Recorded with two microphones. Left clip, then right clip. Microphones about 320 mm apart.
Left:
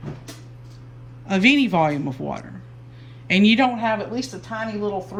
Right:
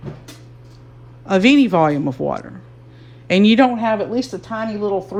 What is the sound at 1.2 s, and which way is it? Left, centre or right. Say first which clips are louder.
Speech: right 4 dB; centre.